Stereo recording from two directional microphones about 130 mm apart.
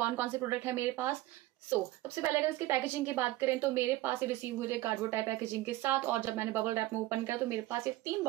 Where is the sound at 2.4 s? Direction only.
15° right (ahead or behind).